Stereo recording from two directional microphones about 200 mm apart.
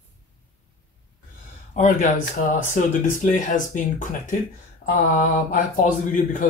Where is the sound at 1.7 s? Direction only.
40° left (ahead or behind).